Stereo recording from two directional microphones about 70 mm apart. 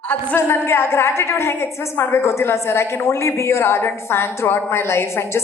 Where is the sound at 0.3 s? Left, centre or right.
Left.